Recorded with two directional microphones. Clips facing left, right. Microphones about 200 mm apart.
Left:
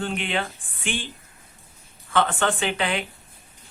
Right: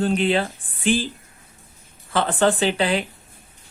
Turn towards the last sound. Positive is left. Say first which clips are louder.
# right 5 dB
turn(degrees=-35)  # may be behind; listen again after turning